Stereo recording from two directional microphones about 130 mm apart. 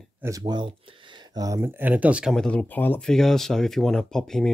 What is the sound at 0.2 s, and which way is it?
Speech, 30° right (ahead or behind).